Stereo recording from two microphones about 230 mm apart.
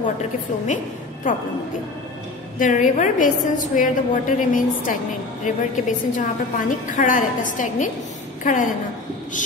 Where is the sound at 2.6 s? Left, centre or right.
Left.